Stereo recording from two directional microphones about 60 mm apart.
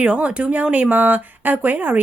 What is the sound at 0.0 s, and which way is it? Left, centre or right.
Speech, centre.